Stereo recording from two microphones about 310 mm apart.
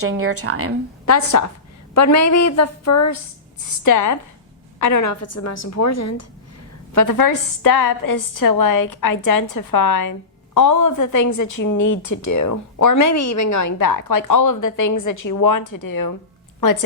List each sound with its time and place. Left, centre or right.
0.0 s speech: right
1.0 s a woman's voice: left
3.8 s a woman's voice: left
6.9 s a woman's voice: left